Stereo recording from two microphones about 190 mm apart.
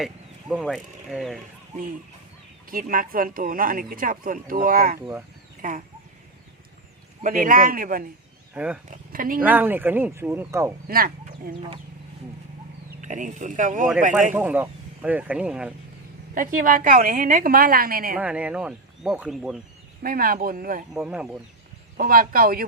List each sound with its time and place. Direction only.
0.0 s speech: centre (ahead or behind)
2.6 s speech: 45° right (ahead or behind)
7.2 s speech: 45° right (ahead or behind)
8.5 s speech: 5° right (ahead or behind)
8.9 s speech: 45° right (ahead or behind)
9.4 s speech: 10° right (ahead or behind)
10.8 s speech: 50° right (ahead or behind)
13.0 s speech: 40° right (ahead or behind)
14.3 s speech: 10° right (ahead or behind)
16.3 s speech: 45° right (ahead or behind)
18.2 s speech: 5° right (ahead or behind)
20.0 s speech: 50° right (ahead or behind)
20.9 s speech: 5° right (ahead or behind)
21.9 s speech: 50° right (ahead or behind)